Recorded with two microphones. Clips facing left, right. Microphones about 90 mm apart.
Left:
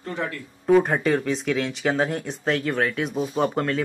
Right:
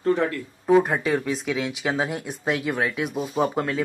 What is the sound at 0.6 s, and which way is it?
Speech, 5° right (ahead or behind).